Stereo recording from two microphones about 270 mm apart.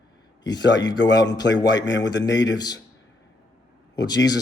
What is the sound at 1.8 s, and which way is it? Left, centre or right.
Speech, left.